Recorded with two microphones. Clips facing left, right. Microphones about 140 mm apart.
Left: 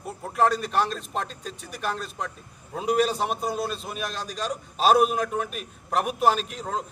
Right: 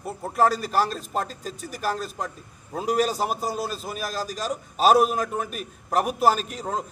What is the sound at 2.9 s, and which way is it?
Speech, 40° right (ahead or behind).